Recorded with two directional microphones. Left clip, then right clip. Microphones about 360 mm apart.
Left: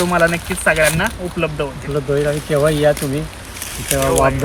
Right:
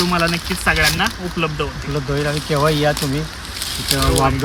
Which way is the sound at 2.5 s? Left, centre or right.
Centre.